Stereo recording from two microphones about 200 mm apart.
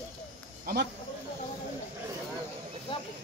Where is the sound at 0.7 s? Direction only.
50° right (ahead or behind).